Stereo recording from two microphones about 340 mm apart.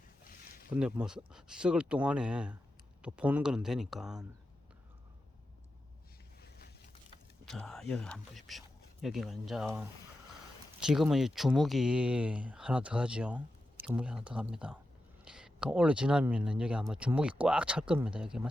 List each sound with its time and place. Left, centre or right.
0.3 s a sound: left
0.7 s speech: centre
7.4 s speech: centre